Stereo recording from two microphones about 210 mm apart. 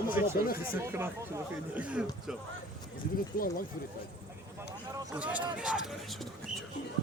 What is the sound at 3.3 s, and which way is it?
Speech, 45° left (ahead or behind).